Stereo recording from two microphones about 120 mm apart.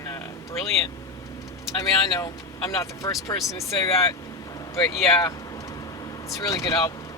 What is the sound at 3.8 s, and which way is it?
Vehicle, 25° left (ahead or behind).